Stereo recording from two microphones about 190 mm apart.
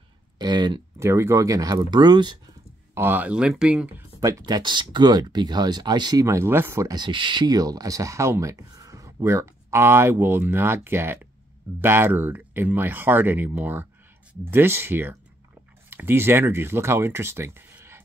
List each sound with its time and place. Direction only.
0.4 s speech: 20° right (ahead or behind)
2.9 s speech: 10° right (ahead or behind)
4.2 s speech: 20° right (ahead or behind)